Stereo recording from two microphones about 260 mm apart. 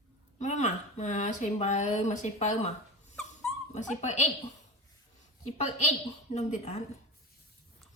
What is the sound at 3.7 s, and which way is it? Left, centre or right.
Speech, left.